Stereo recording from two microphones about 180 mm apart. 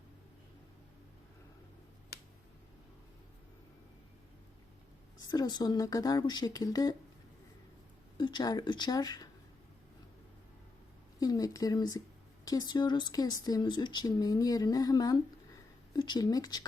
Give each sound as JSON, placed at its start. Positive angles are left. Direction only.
{"t": 5.3, "sound": "speech", "side_deg": 25}
{"t": 8.2, "sound": "speech", "side_deg": 25}
{"t": 11.2, "sound": "speech", "side_deg": 20}